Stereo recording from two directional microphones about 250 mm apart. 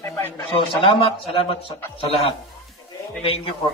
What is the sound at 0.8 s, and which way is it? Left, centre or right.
A man's voice, left.